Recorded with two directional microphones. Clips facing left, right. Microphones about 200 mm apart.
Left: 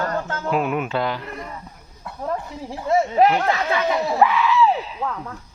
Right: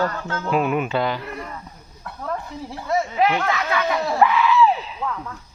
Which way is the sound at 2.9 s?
35° left (ahead or behind).